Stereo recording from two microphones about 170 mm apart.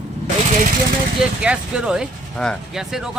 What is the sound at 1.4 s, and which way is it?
Speech, 5° right (ahead or behind).